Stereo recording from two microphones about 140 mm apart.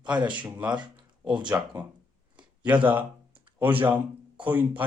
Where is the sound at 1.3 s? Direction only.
30° right (ahead or behind).